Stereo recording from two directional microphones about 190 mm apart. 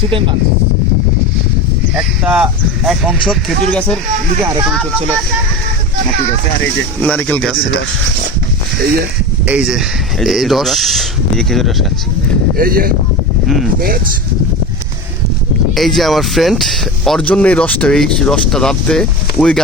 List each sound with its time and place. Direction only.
2.0 s speech: 5° right (ahead or behind)
7.0 s speech: 10° left (ahead or behind)
9.5 s speech: 5° right (ahead or behind)
12.5 s speech: 50° right (ahead or behind)
15.7 s speech: centre (ahead or behind)